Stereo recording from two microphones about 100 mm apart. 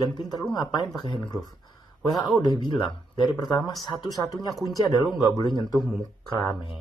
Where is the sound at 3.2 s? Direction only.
45° left (ahead or behind).